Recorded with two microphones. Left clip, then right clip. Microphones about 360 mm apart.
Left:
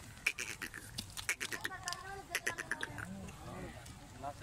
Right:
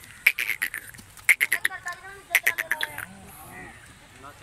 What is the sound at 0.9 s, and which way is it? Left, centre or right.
Duck, centre.